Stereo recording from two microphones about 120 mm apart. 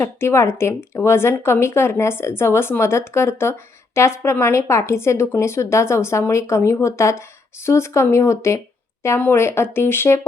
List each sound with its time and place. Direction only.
0.0 s speech: 20° left (ahead or behind)